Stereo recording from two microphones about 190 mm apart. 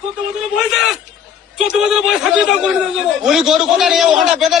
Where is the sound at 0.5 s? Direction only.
Centre (ahead or behind).